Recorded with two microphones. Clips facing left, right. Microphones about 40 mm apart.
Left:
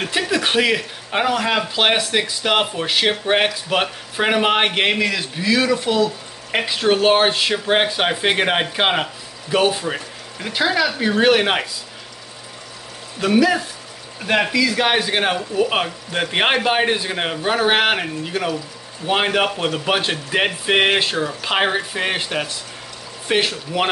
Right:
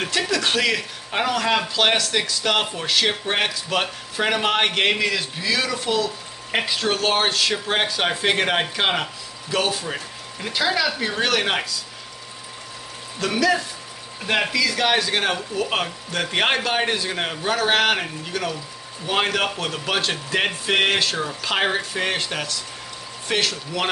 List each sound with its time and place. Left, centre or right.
0.3 s speech: left
13.2 s speech: centre
14.2 s speech: centre